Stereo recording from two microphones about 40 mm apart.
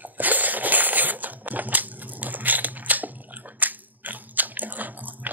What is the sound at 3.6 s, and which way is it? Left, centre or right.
Biting, right.